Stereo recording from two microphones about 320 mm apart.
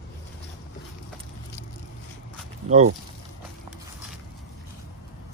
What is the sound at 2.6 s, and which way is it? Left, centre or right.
Speech, right.